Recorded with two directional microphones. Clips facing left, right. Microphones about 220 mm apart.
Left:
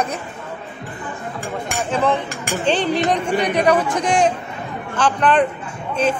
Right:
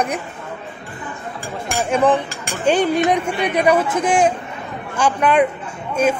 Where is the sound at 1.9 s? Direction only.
15° right (ahead or behind).